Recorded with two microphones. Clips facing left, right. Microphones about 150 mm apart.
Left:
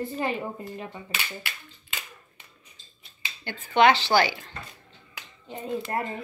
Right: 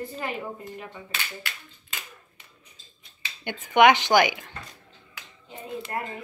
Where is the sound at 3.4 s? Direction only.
15° right (ahead or behind).